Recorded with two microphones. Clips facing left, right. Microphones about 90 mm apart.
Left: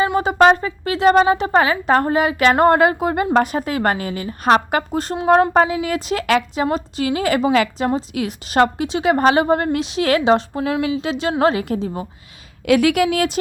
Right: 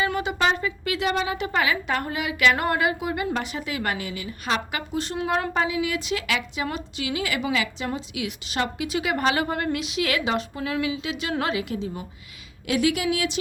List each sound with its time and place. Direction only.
0.2 s a woman's voice: 45° left (ahead or behind)
8.9 s a woman's voice: 35° left (ahead or behind)
12.6 s a woman's voice: 60° left (ahead or behind)